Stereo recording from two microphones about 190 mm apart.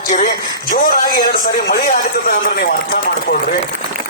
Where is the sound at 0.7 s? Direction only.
45° left (ahead or behind).